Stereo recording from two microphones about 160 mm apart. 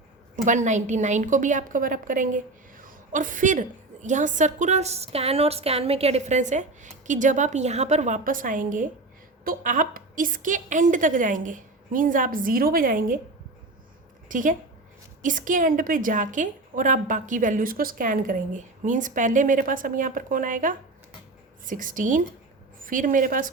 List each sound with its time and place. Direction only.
0.4 s a woman's voice: 50° right (ahead or behind)
14.3 s a woman's voice: 55° right (ahead or behind)